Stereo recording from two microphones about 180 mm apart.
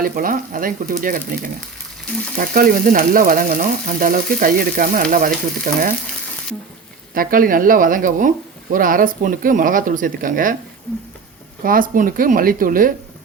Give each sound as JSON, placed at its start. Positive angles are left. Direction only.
{"t": 0.0, "sound": "frying", "side_deg": -50}
{"t": 2.4, "sound": "frying", "side_deg": -50}
{"t": 7.1, "sound": "frying", "side_deg": -50}
{"t": 11.6, "sound": "frying", "side_deg": -50}